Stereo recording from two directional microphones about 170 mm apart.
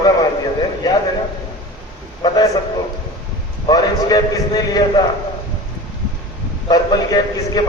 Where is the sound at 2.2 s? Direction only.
20° left (ahead or behind).